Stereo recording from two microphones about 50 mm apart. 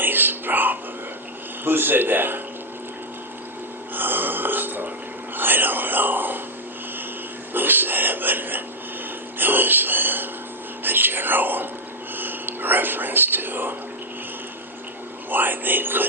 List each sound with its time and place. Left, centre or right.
0.0 s whispering: right
1.6 s speech: right
3.9 s burping: right
5.4 s speech: right
7.5 s speech: right
15.3 s speech: right